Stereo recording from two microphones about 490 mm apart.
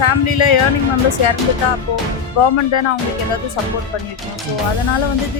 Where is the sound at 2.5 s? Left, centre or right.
Left.